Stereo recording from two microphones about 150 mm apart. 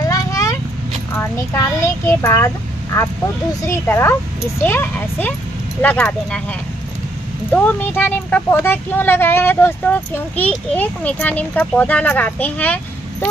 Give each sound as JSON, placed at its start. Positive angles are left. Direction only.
{"t": 0.0, "sound": "a sound", "side_deg": 20}
{"t": 1.1, "sound": "a child's voice", "side_deg": 15}
{"t": 7.5, "sound": "speech", "side_deg": 10}